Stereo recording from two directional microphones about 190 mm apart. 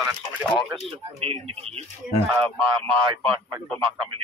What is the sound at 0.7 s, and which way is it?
Speech, 30° right (ahead or behind).